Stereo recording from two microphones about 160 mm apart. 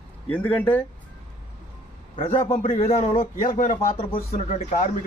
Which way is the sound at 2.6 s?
35° left (ahead or behind).